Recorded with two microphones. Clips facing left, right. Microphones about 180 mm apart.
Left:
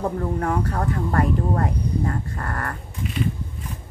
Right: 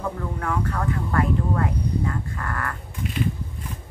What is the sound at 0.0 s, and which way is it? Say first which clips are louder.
Speech: left 5 dB; 35° left (ahead or behind).